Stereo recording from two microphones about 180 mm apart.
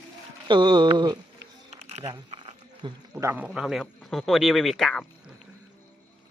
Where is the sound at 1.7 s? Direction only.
35° right (ahead or behind).